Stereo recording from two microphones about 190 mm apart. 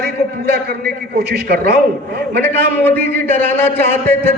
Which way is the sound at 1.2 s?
55° right (ahead or behind).